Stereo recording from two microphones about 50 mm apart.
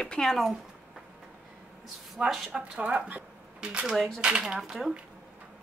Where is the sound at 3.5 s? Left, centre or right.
Centre.